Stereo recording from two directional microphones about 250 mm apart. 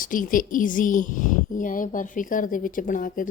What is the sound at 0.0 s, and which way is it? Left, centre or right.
A woman's voice, left.